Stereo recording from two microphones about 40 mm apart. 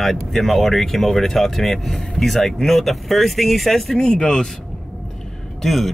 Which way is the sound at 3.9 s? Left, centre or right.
Left.